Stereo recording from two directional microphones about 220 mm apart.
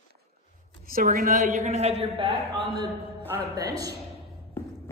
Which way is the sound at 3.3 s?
15° right (ahead or behind).